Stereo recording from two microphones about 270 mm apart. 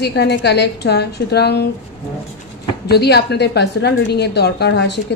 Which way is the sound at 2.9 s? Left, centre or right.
Left.